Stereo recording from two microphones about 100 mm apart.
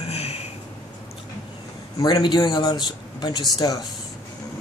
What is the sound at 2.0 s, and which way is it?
Speech, 45° left (ahead or behind).